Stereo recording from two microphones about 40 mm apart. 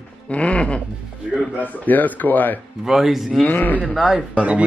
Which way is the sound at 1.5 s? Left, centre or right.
Left.